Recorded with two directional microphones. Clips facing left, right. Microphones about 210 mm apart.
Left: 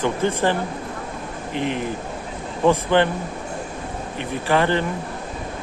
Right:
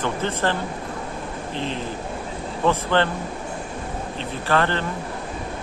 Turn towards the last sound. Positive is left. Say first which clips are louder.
# left 3 dB
turn(degrees=15)  # may be behind; listen again after turning